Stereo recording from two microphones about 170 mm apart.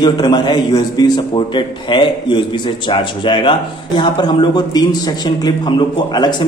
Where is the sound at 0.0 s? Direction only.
25° left (ahead or behind).